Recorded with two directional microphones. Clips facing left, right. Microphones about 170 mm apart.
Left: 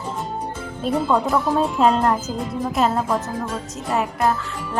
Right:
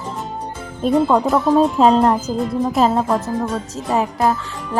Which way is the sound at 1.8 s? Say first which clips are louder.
Right 4 dB; 30° right (ahead or behind).